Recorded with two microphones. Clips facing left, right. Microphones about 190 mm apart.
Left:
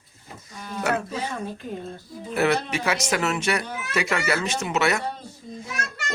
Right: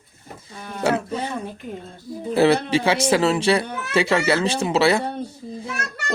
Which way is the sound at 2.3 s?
30° right (ahead or behind).